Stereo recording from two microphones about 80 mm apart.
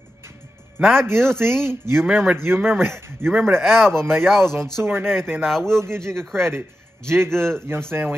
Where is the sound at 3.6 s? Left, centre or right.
Centre.